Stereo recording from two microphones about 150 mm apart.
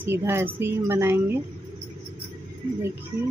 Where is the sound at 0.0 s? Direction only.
15° right (ahead or behind).